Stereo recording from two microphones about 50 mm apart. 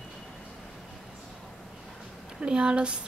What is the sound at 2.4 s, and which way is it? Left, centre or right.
Speech, centre.